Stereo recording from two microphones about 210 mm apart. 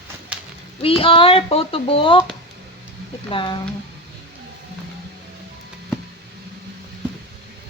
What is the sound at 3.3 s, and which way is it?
Speech, 25° left (ahead or behind).